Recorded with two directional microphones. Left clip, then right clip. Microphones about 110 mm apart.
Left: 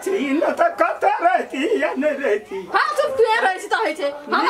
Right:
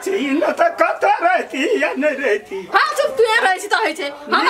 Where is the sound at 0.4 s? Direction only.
Centre (ahead or behind).